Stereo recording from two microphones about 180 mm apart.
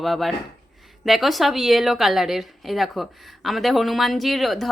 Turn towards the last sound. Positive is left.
turn(degrees=0)  # may be behind; listen again after turning